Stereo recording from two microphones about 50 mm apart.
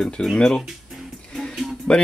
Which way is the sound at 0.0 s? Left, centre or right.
Centre.